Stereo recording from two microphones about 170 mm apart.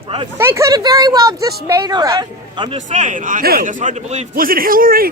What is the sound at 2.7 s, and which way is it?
A man's voice, 45° right (ahead or behind).